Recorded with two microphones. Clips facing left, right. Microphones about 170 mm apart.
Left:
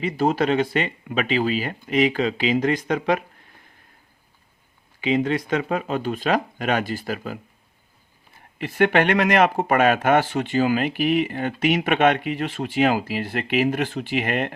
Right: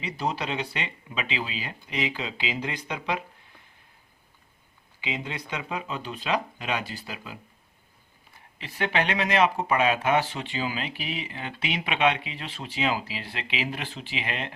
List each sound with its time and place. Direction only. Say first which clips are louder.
0.0 s speech: left 9 dB; 50° left (ahead or behind)
4.9 s speech: left 13 dB; 50° left (ahead or behind)
8.5 s speech: left 9 dB; 50° left (ahead or behind)